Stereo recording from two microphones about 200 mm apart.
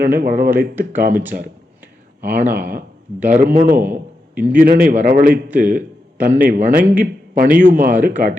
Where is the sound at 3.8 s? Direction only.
10° right (ahead or behind).